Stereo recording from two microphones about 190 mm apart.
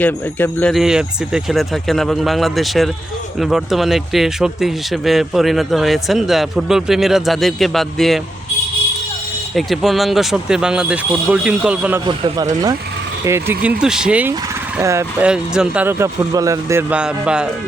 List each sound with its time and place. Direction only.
0.0 s speech: 10° left (ahead or behind)
9.6 s speech: centre (ahead or behind)
12.0 s speech: 20° right (ahead or behind); by 17.5 s 5° right (ahead or behind)